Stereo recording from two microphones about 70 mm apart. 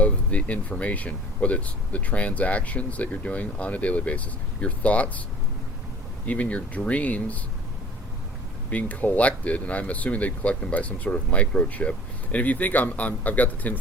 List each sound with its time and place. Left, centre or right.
0.0 s speech: centre
6.2 s speech: left
8.7 s speech: left